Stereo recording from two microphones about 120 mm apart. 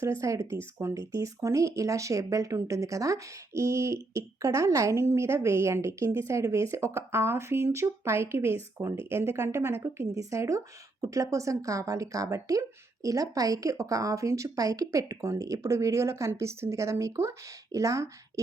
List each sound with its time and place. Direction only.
0.0 s speech: 25° right (ahead or behind)